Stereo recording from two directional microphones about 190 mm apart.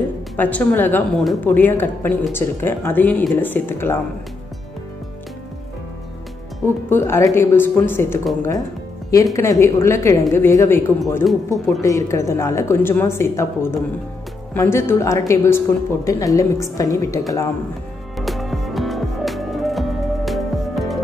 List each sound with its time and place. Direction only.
0.4 s speech: 5° left (ahead or behind)
6.9 s speech: 15° left (ahead or behind)
18.1 s music: centre (ahead or behind)